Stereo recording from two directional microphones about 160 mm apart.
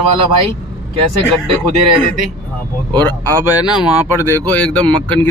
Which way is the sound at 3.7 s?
5° right (ahead or behind).